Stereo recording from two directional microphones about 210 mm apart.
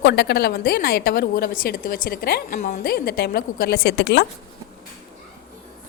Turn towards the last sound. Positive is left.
turn(degrees=55)  # may be behind; listen again after turning